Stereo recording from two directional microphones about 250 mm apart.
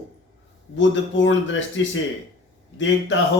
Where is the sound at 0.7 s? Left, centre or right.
Left.